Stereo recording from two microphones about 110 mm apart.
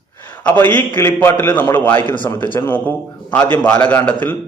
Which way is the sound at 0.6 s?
20° left (ahead or behind).